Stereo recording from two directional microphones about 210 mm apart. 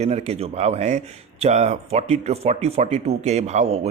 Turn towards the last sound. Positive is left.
turn(degrees=-30)  # may be behind; listen again after turning